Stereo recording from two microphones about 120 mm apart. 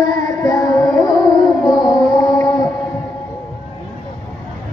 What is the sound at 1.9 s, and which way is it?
Music, 35° left (ahead or behind).